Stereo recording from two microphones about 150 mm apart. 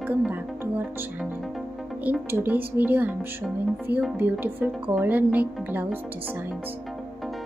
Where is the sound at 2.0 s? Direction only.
10° right (ahead or behind).